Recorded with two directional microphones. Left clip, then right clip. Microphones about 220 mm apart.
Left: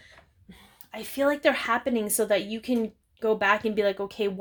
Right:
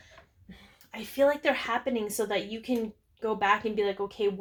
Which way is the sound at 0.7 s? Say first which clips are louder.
Right 1 dB; 40° left (ahead or behind).